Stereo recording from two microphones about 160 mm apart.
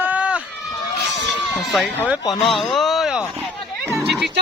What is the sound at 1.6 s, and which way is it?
Speech, centre (ahead or behind).